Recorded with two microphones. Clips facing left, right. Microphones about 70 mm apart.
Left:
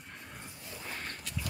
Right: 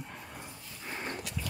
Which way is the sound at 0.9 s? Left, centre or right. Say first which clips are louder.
Right 6 dB; centre.